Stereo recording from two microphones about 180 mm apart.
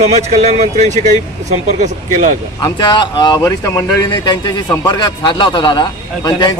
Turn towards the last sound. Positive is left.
turn(degrees=25)  # may be behind; listen again after turning